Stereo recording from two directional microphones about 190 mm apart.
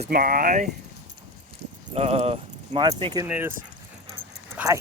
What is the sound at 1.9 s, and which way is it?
Speech, 35° right (ahead or behind).